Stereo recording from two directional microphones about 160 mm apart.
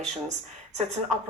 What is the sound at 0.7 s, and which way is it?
Speech, 45° right (ahead or behind).